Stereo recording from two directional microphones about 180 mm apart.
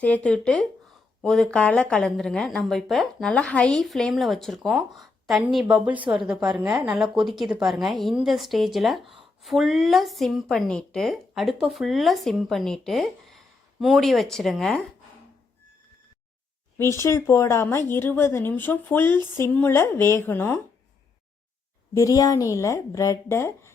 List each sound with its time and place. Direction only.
0.0 s a woman's voice: 5° left (ahead or behind)
16.7 s speech: 15° left (ahead or behind)
21.9 s speech: 20° left (ahead or behind)